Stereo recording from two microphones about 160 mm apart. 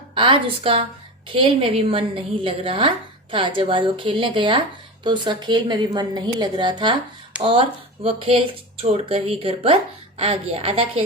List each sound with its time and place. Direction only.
0.1 s a woman's voice: 30° right (ahead or behind)
7.3 s speech: 5° right (ahead or behind)
8.0 s a woman's voice: 35° right (ahead or behind)